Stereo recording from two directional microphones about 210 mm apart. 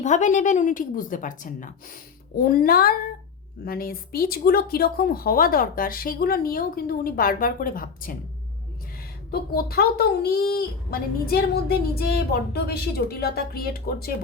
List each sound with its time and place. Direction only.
0.0 s a woman's voice: 35° left (ahead or behind)
9.3 s a woman's voice: 45° left (ahead or behind)